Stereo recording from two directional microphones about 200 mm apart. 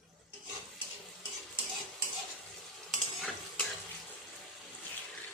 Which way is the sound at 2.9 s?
5° left (ahead or behind).